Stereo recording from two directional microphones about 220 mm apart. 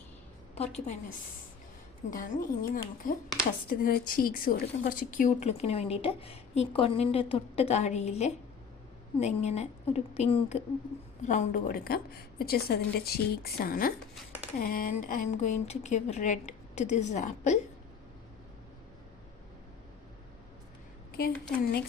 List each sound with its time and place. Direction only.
0.5 s speech: 30° left (ahead or behind)
2.0 s a woman's voice: 35° left (ahead or behind)
21.1 s a sound: 45° left (ahead or behind)